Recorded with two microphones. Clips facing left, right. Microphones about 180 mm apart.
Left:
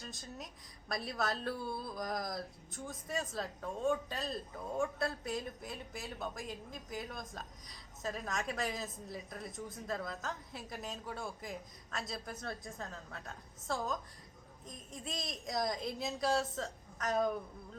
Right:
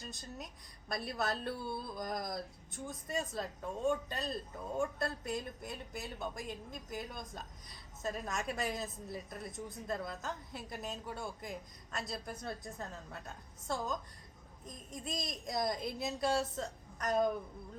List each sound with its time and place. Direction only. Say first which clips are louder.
0.0 s speech: right 1 dB; centre (ahead or behind)
15.0 s speech: right 1 dB; centre (ahead or behind)